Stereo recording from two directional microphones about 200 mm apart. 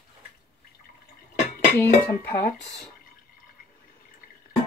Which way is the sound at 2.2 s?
45° left (ahead or behind).